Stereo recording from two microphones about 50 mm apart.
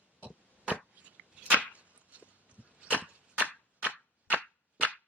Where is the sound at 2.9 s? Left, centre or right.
Left.